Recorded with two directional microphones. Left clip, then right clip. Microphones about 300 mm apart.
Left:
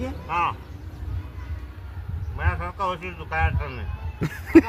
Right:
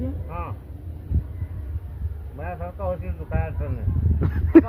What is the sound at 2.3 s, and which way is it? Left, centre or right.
Speech, centre.